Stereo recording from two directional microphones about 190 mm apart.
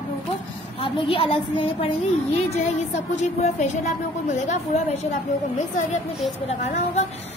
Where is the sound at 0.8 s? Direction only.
30° left (ahead or behind).